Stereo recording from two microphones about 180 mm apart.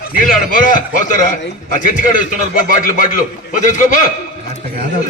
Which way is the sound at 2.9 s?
45° left (ahead or behind).